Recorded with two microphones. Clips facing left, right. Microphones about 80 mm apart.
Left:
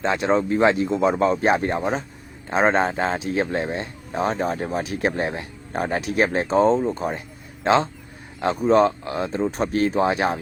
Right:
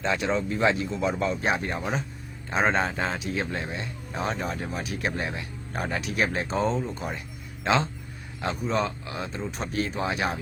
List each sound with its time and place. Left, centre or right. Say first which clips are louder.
0.0 s speech: left 6 dB; left